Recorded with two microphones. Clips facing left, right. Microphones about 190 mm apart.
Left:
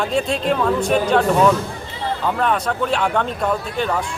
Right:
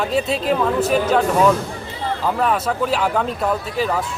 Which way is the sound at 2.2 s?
5° right (ahead or behind).